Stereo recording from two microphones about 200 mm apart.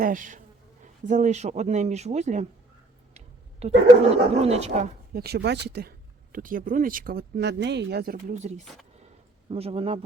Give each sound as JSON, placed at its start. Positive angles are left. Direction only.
{"t": 0.0, "sound": "speech", "side_deg": -40}
{"t": 3.6, "sound": "speech", "side_deg": -30}
{"t": 5.2, "sound": "speech", "side_deg": -55}
{"t": 6.3, "sound": "a man's voice", "side_deg": -45}